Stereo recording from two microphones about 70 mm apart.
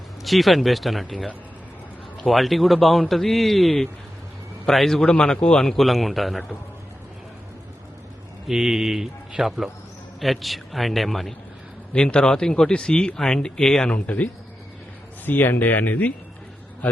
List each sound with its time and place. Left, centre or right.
0.3 s speech: centre
8.4 s speech: centre
11.9 s speech: centre
15.3 s speech: left